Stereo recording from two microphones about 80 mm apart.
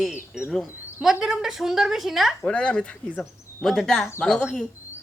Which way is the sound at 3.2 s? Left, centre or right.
Centre.